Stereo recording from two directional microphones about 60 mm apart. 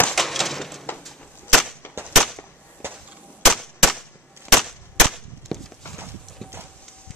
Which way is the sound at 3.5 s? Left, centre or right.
Centre.